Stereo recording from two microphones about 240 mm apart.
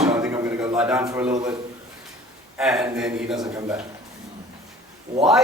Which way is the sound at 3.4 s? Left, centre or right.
Centre.